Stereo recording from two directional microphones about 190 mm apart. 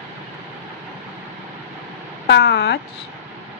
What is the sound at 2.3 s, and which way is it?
Speech, 60° left (ahead or behind).